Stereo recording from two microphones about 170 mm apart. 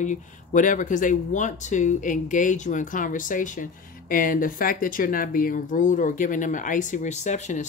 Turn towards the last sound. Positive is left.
turn(degrees=45)  # may be behind; listen again after turning